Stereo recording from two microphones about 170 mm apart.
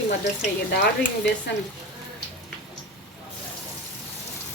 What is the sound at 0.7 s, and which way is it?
Speech, 70° left (ahead or behind).